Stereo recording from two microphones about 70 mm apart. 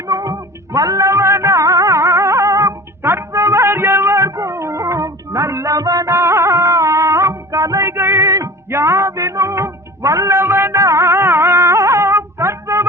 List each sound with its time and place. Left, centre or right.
0.1 s music: right
3.0 s a sound: right
8.2 s music: right
10.3 s music: right
10.8 s music: right